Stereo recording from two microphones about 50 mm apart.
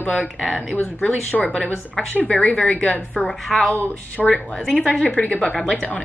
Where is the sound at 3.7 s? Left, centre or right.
Left.